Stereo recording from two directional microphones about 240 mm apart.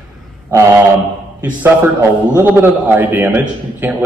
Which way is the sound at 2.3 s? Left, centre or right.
Centre.